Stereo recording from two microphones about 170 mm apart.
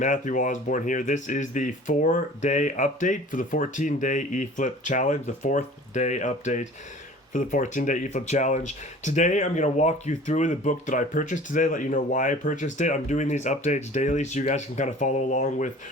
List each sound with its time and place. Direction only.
0.0 s speech: 50° left (ahead or behind)